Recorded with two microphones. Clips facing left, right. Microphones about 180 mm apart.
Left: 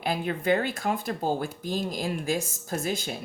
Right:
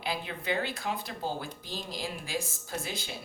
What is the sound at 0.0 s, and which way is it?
Speech, 50° left (ahead or behind).